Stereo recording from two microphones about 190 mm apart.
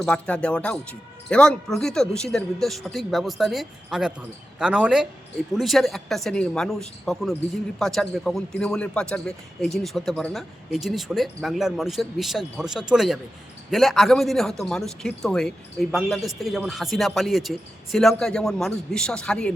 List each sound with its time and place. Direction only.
0.0 s speech: 5° left (ahead or behind)